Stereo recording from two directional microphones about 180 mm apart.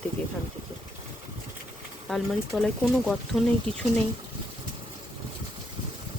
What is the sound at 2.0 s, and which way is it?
Speech, 5° left (ahead or behind).